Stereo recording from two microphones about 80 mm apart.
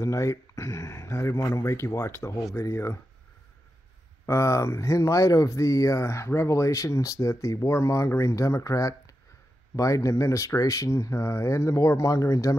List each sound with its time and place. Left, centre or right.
0.0 s speech: left
4.3 s speech: left